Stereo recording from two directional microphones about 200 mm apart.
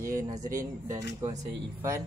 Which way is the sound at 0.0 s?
15° right (ahead or behind).